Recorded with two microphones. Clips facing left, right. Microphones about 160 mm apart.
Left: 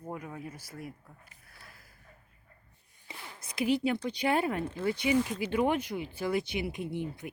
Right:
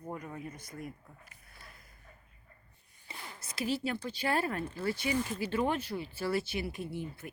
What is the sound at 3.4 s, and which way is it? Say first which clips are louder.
Speech: left 5 dB; 15° left (ahead or behind).